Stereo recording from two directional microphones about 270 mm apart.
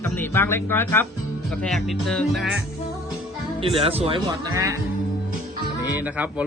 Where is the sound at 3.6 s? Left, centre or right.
Centre.